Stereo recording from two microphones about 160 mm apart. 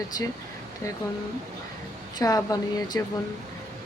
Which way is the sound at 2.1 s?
20° left (ahead or behind).